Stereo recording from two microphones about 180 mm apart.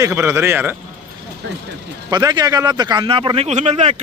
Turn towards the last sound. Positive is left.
turn(degrees=-35)  # may be behind; listen again after turning